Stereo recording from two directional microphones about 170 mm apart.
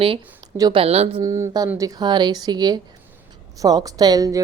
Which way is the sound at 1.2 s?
15° right (ahead or behind).